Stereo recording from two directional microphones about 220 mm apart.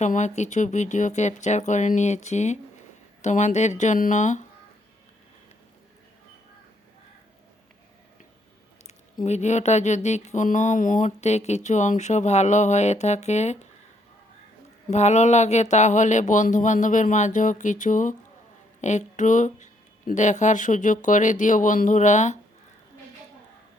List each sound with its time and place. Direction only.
0.0 s speech: 35° left (ahead or behind)
9.2 s speech: 30° left (ahead or behind)
14.8 s speech: 30° left (ahead or behind)